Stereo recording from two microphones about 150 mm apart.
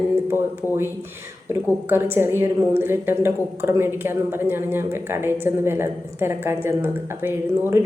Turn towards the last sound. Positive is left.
turn(degrees=-15)  # may be behind; listen again after turning